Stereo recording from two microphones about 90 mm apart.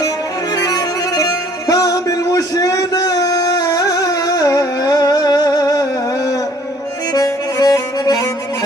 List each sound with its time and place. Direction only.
0.5 s music: 45° left (ahead or behind)